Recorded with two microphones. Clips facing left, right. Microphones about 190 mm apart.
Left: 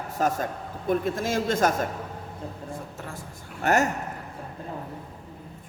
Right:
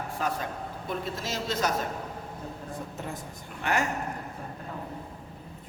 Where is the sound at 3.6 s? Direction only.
45° left (ahead or behind).